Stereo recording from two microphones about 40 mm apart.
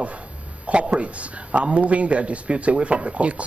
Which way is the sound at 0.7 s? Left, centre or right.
Right.